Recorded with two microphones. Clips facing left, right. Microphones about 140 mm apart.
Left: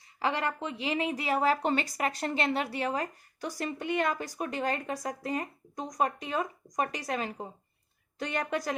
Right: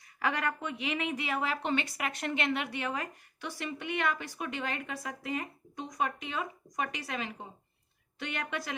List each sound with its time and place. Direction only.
0.2 s a woman's voice: 25° left (ahead or behind)